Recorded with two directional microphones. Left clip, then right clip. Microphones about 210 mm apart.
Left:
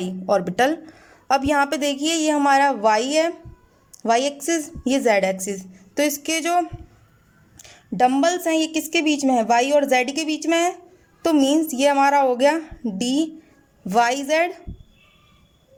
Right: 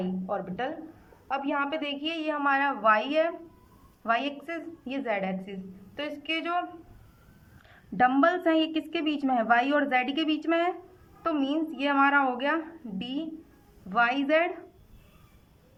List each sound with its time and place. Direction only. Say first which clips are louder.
0.0 s a woman's voice: left 11 dB; 35° left (ahead or behind)